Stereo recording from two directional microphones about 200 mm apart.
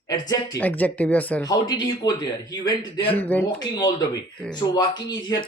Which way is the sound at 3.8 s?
20° left (ahead or behind).